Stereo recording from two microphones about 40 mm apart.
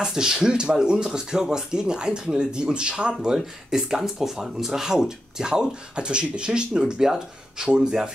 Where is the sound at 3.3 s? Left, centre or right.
Centre.